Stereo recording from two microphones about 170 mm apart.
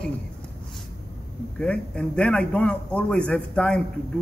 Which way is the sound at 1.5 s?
5° left (ahead or behind).